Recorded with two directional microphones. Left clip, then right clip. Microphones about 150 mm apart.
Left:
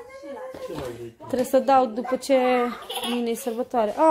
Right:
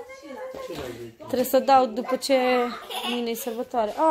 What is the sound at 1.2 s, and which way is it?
A woman's voice, 15° left (ahead or behind).